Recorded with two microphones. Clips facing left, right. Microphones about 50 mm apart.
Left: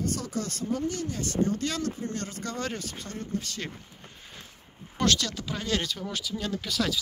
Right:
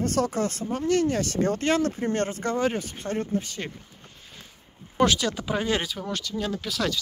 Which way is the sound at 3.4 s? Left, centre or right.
Centre.